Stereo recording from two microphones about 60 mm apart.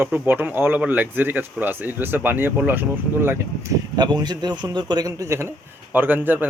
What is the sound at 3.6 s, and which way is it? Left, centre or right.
Speech, right.